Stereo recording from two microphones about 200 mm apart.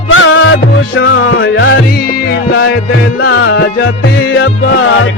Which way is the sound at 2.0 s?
50° left (ahead or behind).